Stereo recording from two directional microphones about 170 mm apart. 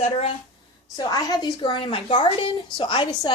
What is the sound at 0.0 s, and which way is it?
Speech, 35° left (ahead or behind).